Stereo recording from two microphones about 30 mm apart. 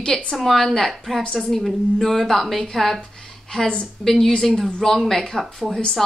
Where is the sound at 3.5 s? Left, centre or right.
Left.